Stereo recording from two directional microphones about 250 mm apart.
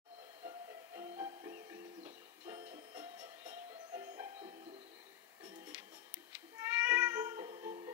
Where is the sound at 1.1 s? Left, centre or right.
Centre.